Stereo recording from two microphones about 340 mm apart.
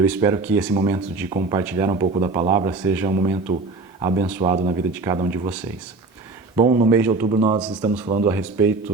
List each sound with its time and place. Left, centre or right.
0.0 s speech: centre
6.6 s speech: centre